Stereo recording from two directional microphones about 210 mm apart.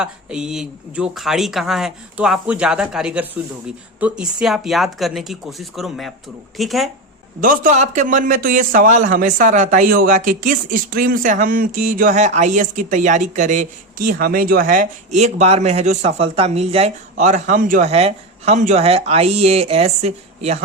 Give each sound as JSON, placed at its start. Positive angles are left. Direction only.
{"t": 0.0, "sound": "speech", "side_deg": -5}
{"t": 7.4, "sound": "speech", "side_deg": -40}